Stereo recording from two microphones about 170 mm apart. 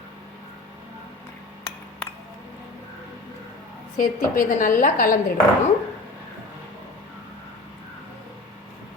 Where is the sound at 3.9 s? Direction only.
55° left (ahead or behind).